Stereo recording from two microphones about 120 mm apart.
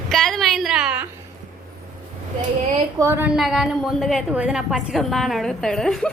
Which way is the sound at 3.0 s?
20° right (ahead or behind).